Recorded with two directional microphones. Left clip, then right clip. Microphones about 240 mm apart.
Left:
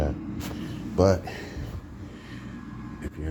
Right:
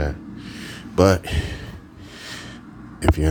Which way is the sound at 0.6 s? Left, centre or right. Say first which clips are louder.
Right 5 dB; right.